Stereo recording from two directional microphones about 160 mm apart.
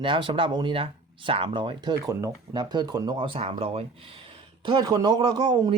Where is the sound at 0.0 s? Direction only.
30° right (ahead or behind).